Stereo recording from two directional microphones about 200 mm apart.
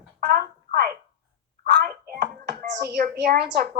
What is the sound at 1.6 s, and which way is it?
Hands, 50° right (ahead or behind).